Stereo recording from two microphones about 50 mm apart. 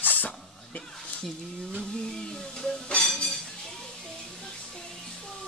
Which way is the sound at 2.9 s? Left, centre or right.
Centre.